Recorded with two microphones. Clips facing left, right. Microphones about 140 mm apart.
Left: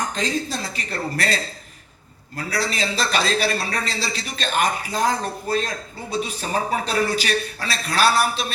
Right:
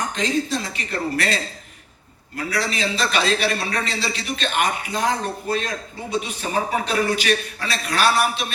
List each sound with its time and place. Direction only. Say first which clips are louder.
0.1 s a man's voice: right 2 dB; 40° left (ahead or behind)